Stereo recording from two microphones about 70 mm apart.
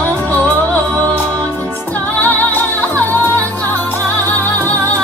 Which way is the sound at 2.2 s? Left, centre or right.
Left.